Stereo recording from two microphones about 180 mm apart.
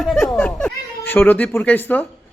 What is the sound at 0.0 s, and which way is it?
Chuckle, centre (ahead or behind).